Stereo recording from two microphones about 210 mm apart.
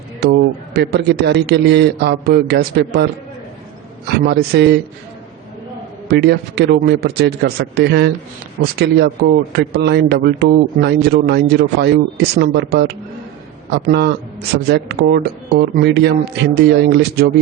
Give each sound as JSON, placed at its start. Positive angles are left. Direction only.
{"t": 0.2, "sound": "a man's voice", "side_deg": -50}
{"t": 4.2, "sound": "a man's voice", "side_deg": -55}
{"t": 6.1, "sound": "a man's voice", "side_deg": -50}